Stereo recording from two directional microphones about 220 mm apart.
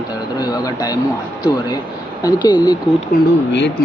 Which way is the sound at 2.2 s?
20° left (ahead or behind).